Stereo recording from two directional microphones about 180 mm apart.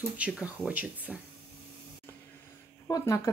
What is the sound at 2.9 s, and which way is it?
Speech, 20° left (ahead or behind).